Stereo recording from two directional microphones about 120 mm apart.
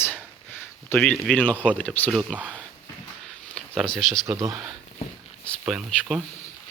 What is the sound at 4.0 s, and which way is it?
Speech, centre (ahead or behind).